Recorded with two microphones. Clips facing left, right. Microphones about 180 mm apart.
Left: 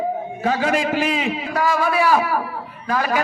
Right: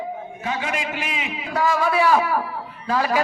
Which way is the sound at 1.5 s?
20° right (ahead or behind).